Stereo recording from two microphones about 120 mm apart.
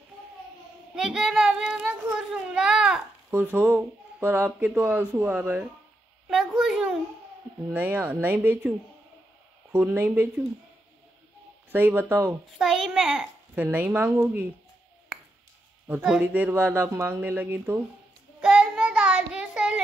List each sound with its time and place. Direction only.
0.9 s a child's voice: 5° right (ahead or behind)
6.2 s a sound: 5° right (ahead or behind)
7.7 s speech: 15° right (ahead or behind)
9.7 s speech: 15° right (ahead or behind)
11.7 s speech: 15° right (ahead or behind)
12.5 s a child's voice: 5° right (ahead or behind)
16.0 s speech: 10° right (ahead or behind)
18.4 s child singing: 5° right (ahead or behind)